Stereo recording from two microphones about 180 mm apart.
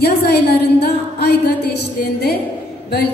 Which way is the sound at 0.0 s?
65° left (ahead or behind).